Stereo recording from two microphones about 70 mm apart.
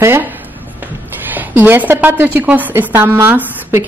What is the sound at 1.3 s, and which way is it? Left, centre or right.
Speech, right.